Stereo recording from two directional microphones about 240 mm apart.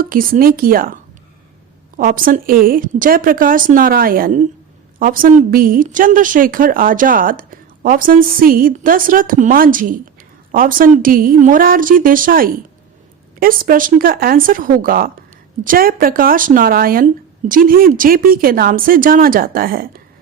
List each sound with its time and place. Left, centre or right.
0.0 s a woman's voice: right
2.0 s a woman's voice: right